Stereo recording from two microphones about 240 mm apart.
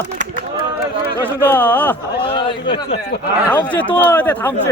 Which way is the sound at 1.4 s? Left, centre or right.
Centre.